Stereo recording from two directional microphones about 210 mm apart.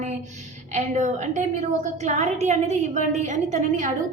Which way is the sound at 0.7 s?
35° right (ahead or behind).